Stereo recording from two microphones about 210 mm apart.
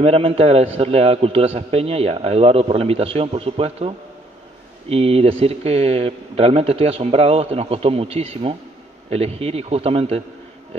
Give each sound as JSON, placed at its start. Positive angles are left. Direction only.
{"t": 0.0, "sound": "a man's voice", "side_deg": -30}